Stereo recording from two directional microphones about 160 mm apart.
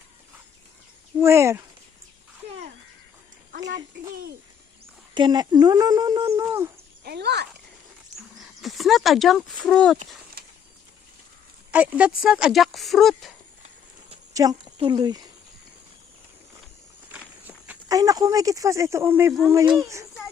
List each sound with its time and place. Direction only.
1.2 s speech: 15° right (ahead or behind)
5.1 s speech: 25° right (ahead or behind)
7.0 s speech: 90° right
8.4 s speech: centre (ahead or behind)
10.4 s a sound: 70° right (ahead or behind)
11.7 s speech: 10° right (ahead or behind)
14.8 s speech: 30° right (ahead or behind)
17.1 s walk: 10° right (ahead or behind)
17.8 s speech: 20° right (ahead or behind)